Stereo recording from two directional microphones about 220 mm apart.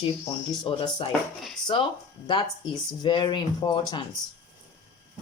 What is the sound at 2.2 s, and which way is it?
Speech, 20° left (ahead or behind).